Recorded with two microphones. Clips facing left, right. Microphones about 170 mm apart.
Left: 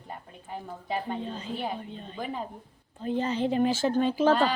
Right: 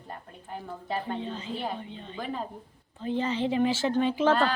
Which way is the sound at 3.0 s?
45° left (ahead or behind).